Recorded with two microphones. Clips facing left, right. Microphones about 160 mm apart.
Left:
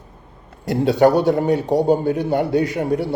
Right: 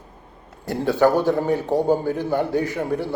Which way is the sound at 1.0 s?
70° left (ahead or behind).